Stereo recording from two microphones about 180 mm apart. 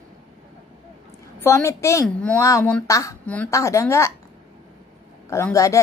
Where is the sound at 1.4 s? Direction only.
15° left (ahead or behind).